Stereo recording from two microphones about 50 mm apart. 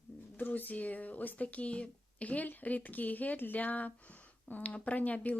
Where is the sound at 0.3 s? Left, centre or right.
Left.